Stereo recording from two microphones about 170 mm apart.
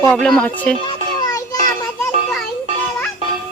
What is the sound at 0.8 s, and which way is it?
Music, 25° left (ahead or behind).